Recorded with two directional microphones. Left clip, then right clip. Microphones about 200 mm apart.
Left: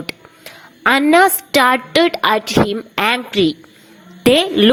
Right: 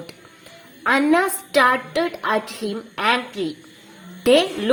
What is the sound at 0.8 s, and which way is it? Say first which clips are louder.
A woman's voice: left 7 dB; 30° left (ahead or behind).